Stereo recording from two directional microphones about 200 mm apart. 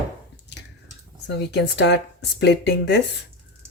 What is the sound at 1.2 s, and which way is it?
Speech, 60° left (ahead or behind).